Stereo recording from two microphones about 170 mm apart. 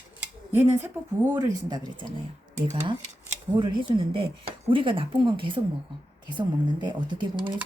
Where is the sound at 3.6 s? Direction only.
30° right (ahead or behind).